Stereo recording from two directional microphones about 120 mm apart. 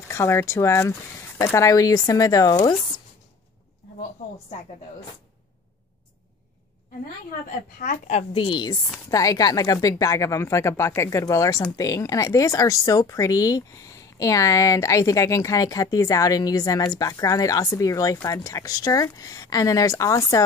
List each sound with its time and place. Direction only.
0.1 s speech: 20° left (ahead or behind)
7.8 s a woman's voice: 70° left (ahead or behind)
8.3 s a woman's voice: 45° left (ahead or behind)
9.1 s speech: 30° left (ahead or behind)